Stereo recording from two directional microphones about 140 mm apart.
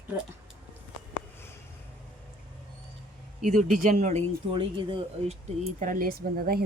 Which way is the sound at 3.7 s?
60° right (ahead or behind).